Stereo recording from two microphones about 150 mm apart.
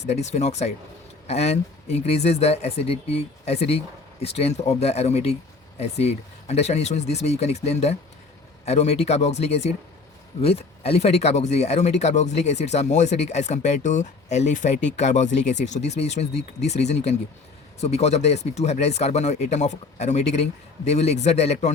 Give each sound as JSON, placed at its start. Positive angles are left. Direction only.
{"t": 0.1, "sound": "speech", "side_deg": 50}